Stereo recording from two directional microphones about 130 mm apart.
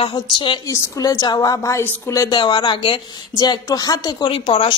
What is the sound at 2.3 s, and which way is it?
A woman's voice, 35° left (ahead or behind).